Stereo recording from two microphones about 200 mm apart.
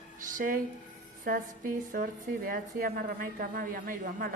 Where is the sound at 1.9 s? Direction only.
45° right (ahead or behind).